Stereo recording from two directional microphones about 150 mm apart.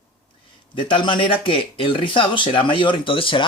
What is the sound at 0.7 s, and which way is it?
Speech, 35° left (ahead or behind).